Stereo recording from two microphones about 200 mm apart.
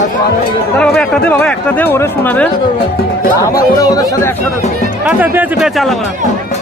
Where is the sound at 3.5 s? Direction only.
15° left (ahead or behind).